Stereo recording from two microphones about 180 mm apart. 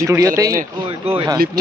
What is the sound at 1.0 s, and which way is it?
Speech, 35° right (ahead or behind).